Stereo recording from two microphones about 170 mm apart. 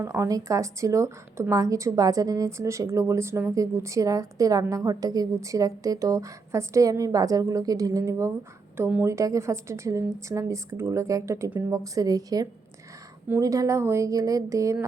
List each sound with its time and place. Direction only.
0.0 s a woman's voice: 15° right (ahead or behind)